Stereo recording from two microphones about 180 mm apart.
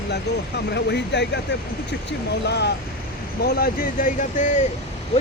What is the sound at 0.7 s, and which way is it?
Speech, 70° left (ahead or behind).